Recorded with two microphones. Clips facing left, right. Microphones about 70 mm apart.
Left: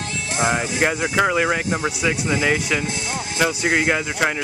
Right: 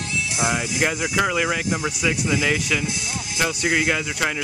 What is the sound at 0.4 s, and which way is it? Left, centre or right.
Speech, left.